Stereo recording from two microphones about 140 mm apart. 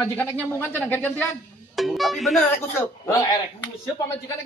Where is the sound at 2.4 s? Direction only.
15° left (ahead or behind).